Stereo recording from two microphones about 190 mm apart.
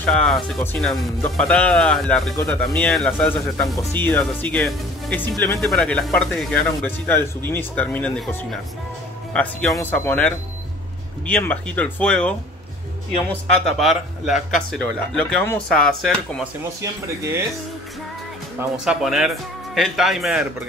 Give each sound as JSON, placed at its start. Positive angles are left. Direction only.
{"t": 0.0, "sound": "speech", "side_deg": 5}
{"t": 16.8, "sound": "speech", "side_deg": -15}
{"t": 18.6, "sound": "speech", "side_deg": -5}